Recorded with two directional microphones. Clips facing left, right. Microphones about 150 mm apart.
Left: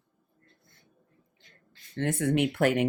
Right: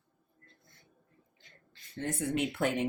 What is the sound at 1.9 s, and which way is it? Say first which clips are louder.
Speech: left 6 dB; 80° left.